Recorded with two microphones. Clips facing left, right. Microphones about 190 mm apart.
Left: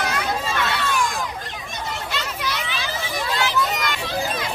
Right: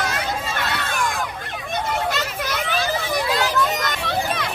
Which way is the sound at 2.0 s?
45° right (ahead or behind).